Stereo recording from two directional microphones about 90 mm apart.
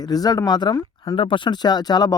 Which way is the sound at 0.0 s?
45° left (ahead or behind).